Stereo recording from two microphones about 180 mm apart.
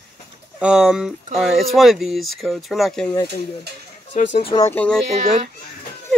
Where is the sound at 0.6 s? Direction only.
5° right (ahead or behind).